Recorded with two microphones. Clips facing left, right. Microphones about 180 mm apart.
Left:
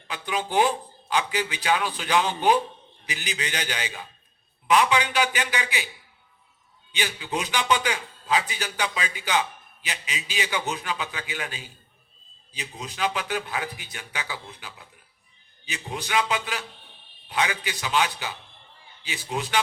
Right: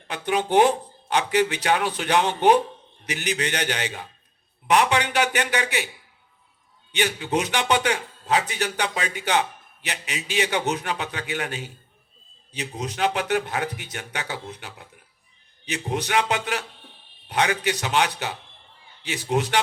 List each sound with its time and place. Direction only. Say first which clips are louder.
0.1 s speech: right 6 dB; 65° right (ahead or behind)
7.2 s speech: right 4 dB; 65° right (ahead or behind)
16.0 s speech: right 1 dB; 65° right (ahead or behind)